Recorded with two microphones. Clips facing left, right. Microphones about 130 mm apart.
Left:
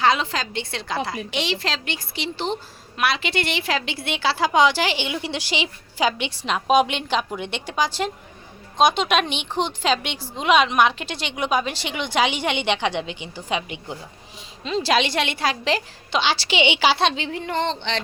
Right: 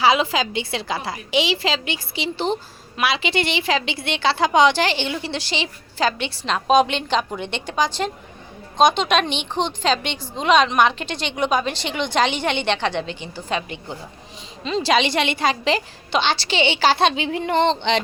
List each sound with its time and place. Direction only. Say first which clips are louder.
0.0 s a woman's voice: right 3 dB; 5° right (ahead or behind); by 13.9 s 15° left (ahead or behind)
14.6 s a woman's voice: right 2 dB; centre (ahead or behind)
17.0 s a woman's voice: right 3 dB; centre (ahead or behind)
17.6 s speech: right 7 dB; 20° right (ahead or behind)